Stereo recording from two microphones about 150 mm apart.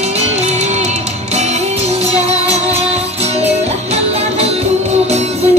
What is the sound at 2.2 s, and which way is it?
Music, 45° right (ahead or behind).